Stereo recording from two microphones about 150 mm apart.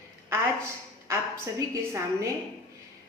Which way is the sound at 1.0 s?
20° right (ahead or behind).